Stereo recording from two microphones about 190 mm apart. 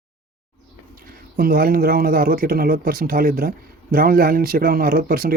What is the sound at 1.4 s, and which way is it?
Speech, 50° right (ahead or behind).